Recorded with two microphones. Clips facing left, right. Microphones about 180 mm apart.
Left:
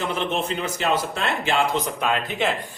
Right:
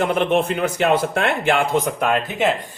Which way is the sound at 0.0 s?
60° right (ahead or behind).